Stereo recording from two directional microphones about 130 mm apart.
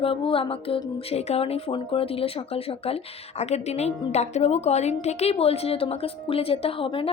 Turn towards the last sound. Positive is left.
turn(degrees=45)  # may be behind; listen again after turning